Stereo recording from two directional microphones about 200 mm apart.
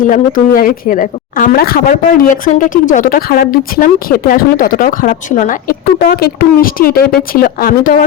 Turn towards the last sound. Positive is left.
turn(degrees=45)  # may be behind; listen again after turning